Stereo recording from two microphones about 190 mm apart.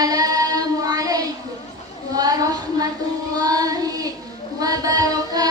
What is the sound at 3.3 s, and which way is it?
Child singing, 20° right (ahead or behind).